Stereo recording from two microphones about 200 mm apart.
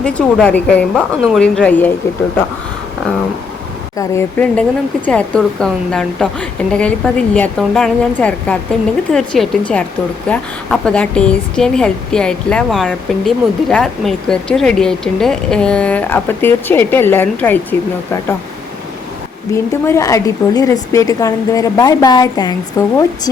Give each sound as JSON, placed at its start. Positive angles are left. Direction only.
{"t": 0.0, "sound": "a woman's voice", "side_deg": 5}
{"t": 3.9, "sound": "a woman's voice", "side_deg": 15}
{"t": 19.5, "sound": "a woman's voice", "side_deg": 15}